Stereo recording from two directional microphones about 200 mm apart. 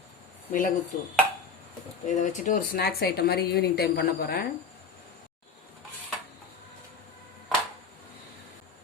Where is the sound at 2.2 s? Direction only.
40° left (ahead or behind).